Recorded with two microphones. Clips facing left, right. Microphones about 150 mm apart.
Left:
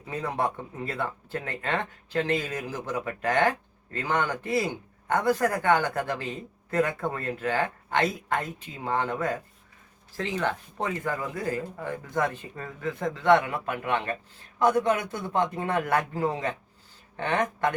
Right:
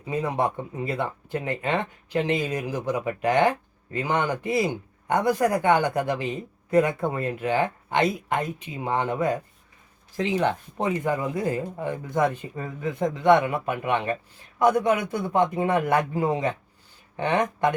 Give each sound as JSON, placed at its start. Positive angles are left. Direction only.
{"t": 0.0, "sound": "a man's voice", "side_deg": -15}